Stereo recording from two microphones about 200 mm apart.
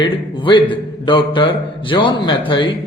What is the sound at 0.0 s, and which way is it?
Speech, 25° left (ahead or behind).